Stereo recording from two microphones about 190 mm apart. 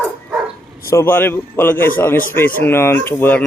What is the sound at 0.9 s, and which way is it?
Speech, 15° left (ahead or behind).